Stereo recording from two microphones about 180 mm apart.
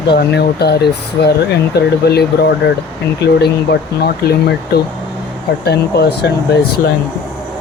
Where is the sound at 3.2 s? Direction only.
70° left (ahead or behind).